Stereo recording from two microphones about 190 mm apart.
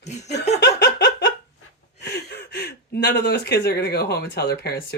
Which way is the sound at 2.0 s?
60° left (ahead or behind).